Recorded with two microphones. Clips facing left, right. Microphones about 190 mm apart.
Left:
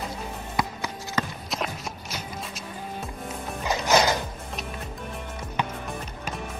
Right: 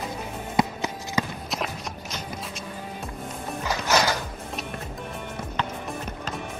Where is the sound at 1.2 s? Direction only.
10° right (ahead or behind).